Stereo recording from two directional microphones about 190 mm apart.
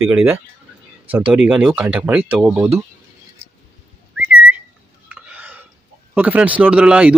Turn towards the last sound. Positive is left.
turn(degrees=-5)  # may be behind; listen again after turning